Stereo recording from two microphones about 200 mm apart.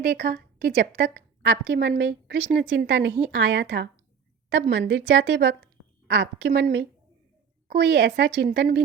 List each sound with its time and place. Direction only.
0.0 s a woman's voice: 45° right (ahead or behind)